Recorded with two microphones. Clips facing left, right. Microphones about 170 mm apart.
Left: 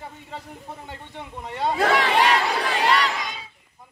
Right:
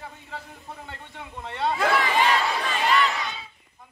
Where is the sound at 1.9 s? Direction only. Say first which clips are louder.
Left 3 dB; 75° left (ahead or behind).